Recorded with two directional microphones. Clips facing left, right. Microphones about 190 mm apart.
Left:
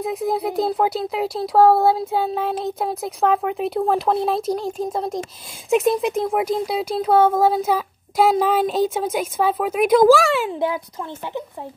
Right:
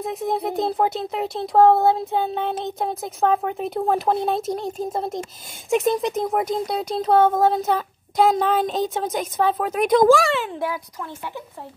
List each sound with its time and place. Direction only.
0.0 s speech: centre (ahead or behind)
10.6 s speech: 25° left (ahead or behind)